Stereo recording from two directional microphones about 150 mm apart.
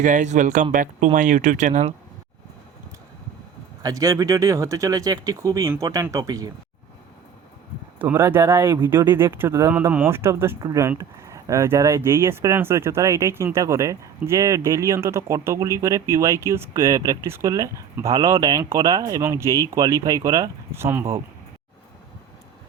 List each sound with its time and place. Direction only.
0.0 s speech: 55° right (ahead or behind)
3.8 s speech: 20° right (ahead or behind)
7.9 s speech: 15° right (ahead or behind)